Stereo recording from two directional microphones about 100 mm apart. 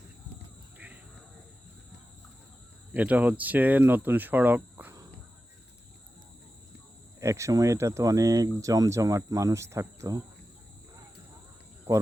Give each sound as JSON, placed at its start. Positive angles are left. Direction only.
{"t": 2.9, "sound": "speech", "side_deg": -15}
{"t": 7.2, "sound": "speech", "side_deg": -30}